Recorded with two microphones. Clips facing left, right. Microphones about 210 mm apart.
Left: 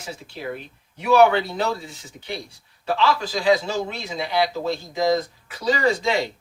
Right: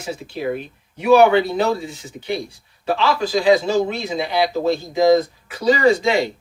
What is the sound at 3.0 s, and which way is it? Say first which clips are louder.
Speech: right 4 dB; 20° right (ahead or behind).